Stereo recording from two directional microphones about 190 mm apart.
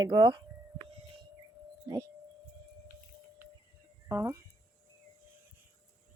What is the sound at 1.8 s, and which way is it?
Speech, 15° right (ahead or behind).